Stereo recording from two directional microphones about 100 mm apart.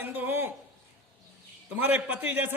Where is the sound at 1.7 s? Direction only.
15° right (ahead or behind).